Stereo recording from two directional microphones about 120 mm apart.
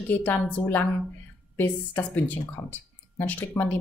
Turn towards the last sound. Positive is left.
turn(degrees=15)  # may be behind; listen again after turning